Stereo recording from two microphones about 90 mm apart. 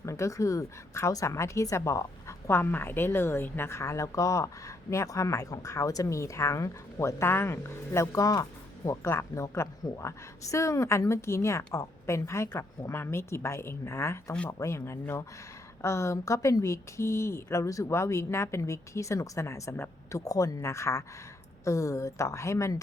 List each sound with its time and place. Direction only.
0.0 s a woman's voice: 35° left (ahead or behind)